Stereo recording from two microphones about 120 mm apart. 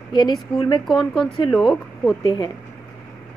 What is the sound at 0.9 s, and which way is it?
Speech, 5° left (ahead or behind).